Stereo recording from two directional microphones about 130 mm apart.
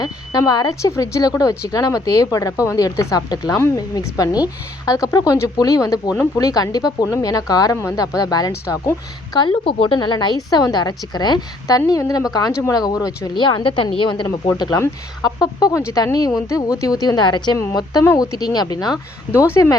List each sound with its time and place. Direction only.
0.0 s speech: 30° left (ahead or behind)
14.3 s speech: 25° left (ahead or behind)